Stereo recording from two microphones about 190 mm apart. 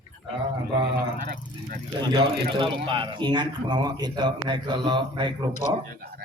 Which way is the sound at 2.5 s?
25° right (ahead or behind).